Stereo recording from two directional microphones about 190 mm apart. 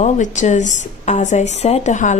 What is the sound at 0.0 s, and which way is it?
Speech, 40° left (ahead or behind).